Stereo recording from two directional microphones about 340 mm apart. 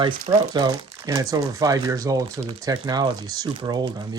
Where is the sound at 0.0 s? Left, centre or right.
Centre.